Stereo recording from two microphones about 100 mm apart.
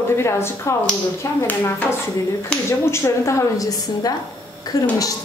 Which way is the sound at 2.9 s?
30° left (ahead or behind).